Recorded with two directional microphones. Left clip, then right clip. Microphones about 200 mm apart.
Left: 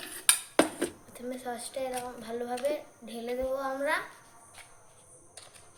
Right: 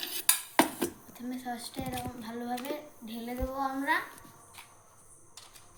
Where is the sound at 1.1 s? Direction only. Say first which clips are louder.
Left 2 dB; 50° left (ahead or behind).